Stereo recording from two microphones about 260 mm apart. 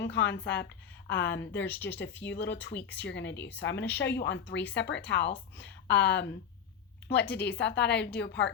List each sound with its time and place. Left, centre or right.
0.0 s a woman's voice: left
1.6 s speech: centre
2.2 s a woman's voice: left
7.3 s a woman's voice: left